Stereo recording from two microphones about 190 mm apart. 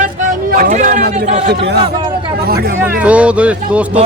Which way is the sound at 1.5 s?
60° right (ahead or behind).